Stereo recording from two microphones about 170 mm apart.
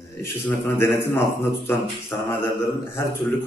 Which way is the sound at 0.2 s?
15° left (ahead or behind).